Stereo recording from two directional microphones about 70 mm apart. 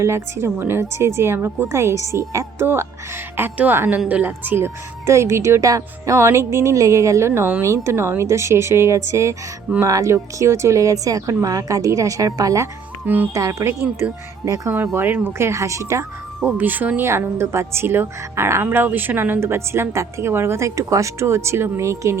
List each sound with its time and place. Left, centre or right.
0.0 s speech: right
4.6 s speech: right
6.1 s speech: right
13.1 s speech: right
13.3 s speech: right
14.9 s speech: right
16.4 s speech: right
17.1 s speech: right